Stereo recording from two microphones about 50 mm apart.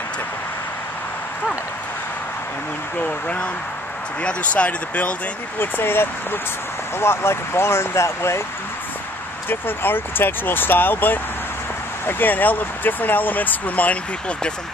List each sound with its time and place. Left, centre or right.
3.0 s speech: left
5.6 s speech: left
9.5 s speech: left